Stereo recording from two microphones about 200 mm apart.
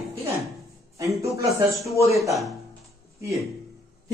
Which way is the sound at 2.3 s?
Centre (ahead or behind).